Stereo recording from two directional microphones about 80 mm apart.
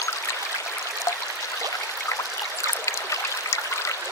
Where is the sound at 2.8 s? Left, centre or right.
Left.